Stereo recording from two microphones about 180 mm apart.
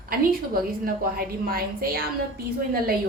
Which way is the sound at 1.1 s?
55° right (ahead or behind).